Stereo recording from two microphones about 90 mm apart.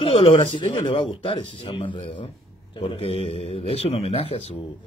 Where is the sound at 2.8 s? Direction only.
85° left.